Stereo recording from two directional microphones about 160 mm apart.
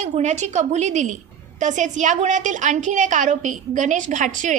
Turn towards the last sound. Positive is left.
turn(degrees=-50)  # may be behind; listen again after turning